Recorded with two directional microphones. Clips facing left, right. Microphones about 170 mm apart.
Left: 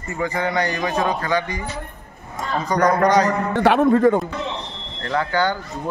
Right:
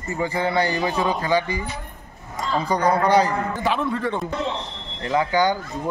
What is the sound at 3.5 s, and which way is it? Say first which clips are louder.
Speech: left 7 dB; 70° left (ahead or behind).